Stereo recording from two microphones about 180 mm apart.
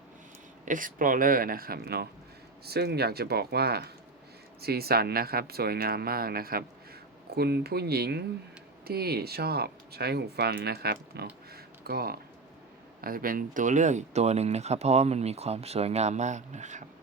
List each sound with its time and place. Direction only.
0.6 s speech: 45° right (ahead or behind); by 11.3 s 60° right (ahead or behind)
11.5 s a sound: 60° right (ahead or behind)
13.0 s speech: 55° right (ahead or behind)